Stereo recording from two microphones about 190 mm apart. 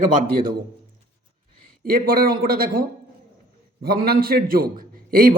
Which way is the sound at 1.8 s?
50° right (ahead or behind).